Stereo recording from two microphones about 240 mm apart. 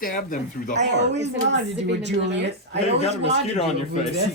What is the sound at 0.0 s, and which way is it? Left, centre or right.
Speech, left.